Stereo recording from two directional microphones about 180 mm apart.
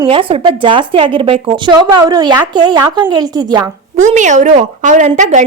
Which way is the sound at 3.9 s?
40° right (ahead or behind).